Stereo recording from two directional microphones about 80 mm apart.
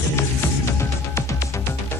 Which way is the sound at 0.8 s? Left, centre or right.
Left.